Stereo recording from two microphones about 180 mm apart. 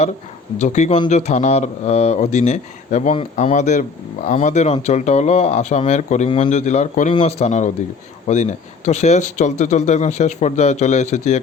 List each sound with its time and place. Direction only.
0.6 s a man's voice: 40° left (ahead or behind)